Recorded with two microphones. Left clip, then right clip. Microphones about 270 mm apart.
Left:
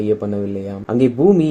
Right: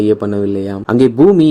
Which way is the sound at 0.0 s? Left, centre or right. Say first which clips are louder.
Right 5 dB; right.